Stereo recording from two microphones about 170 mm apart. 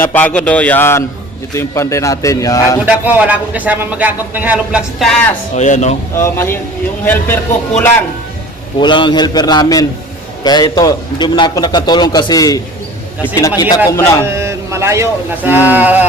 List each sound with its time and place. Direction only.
0.0 s a man's voice: 10° left (ahead or behind)
2.8 s speech: 10° right (ahead or behind)
5.5 s speech: 45° left (ahead or behind)
6.1 s a man's voice: 15° left (ahead or behind)
8.8 s a man's voice: 30° left (ahead or behind)
14.3 s speech: 15° right (ahead or behind)